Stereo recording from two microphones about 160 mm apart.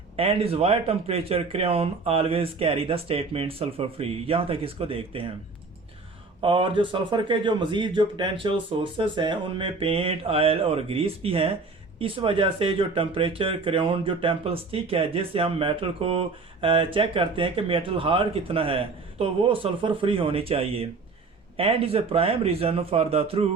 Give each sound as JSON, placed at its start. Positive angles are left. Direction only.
{"t": 0.2, "sound": "speech", "side_deg": -35}
{"t": 6.4, "sound": "speech", "side_deg": -30}